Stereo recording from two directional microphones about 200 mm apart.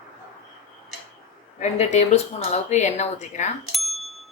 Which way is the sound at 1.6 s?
35° left (ahead or behind).